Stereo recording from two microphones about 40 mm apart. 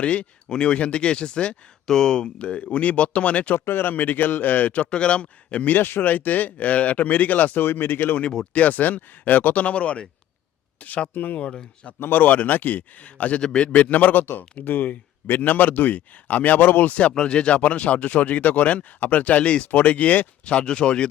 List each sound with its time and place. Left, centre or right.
0.0 s speech: left
3.5 s speech: left
4.9 s speech: left
5.8 s speech: left
6.1 s speech: left
7.6 s speech: left
8.5 s speech: left
11.1 s speech: left
11.3 s speech: left
11.9 s speech: left
13.4 s speech: left
13.7 s speech: left